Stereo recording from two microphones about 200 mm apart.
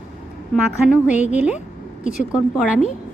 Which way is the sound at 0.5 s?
5° right (ahead or behind).